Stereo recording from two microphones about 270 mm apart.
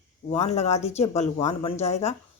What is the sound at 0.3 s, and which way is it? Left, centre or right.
A woman's voice, left.